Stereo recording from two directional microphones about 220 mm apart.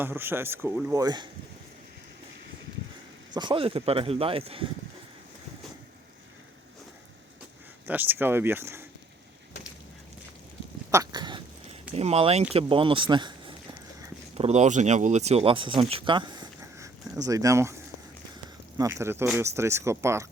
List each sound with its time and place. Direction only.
0.0 s speech: 10° right (ahead or behind)
3.3 s speech: 20° right (ahead or behind)
7.9 s speech: 10° right (ahead or behind)
10.9 s dog: 20° right (ahead or behind)
11.9 s speech: 30° right (ahead or behind)
18.8 s speech: 15° right (ahead or behind)